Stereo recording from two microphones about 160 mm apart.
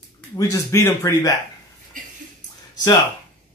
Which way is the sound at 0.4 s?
20° left (ahead or behind).